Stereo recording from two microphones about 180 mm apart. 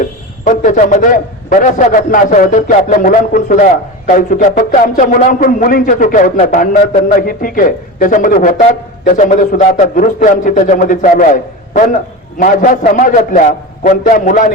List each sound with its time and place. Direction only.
0.4 s a man's voice: 45° left (ahead or behind)